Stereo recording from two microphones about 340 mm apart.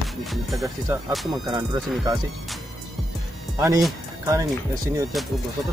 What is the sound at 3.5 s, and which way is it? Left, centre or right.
Speech, centre.